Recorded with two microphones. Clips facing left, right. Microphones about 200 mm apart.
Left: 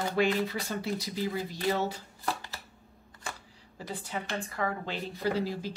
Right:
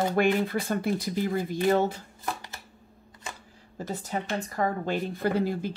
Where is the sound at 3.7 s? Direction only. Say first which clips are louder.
Right 5 dB; 45° right (ahead or behind).